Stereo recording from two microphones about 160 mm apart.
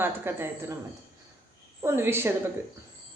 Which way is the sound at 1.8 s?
15° right (ahead or behind).